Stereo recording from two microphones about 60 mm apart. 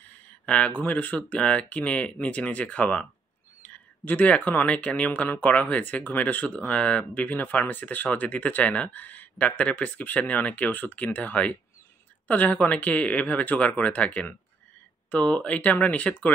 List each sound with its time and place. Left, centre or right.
0.5 s speech: left